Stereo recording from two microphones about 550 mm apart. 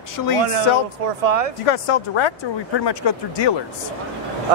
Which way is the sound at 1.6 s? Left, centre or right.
Left.